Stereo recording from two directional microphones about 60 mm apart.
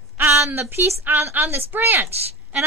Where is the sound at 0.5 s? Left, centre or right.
Right.